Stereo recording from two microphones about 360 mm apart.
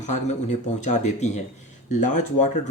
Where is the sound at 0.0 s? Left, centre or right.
Centre.